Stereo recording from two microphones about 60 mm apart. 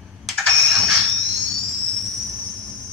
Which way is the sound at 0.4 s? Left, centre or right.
Centre.